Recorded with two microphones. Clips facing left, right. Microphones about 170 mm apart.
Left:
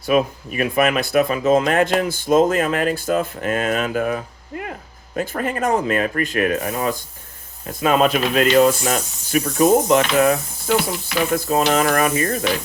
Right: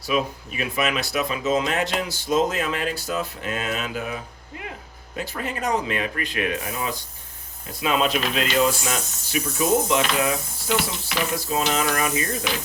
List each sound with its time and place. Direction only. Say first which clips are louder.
0.0 s speech: left 6 dB; 55° left (ahead or behind)